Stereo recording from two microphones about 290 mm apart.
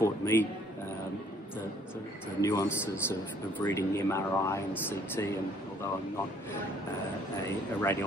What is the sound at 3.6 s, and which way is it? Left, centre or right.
Speech, centre.